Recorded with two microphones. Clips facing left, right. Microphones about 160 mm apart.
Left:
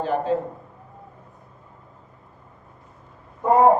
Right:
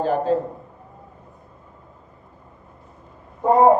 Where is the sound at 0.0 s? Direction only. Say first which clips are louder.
Right 3 dB; 40° right (ahead or behind).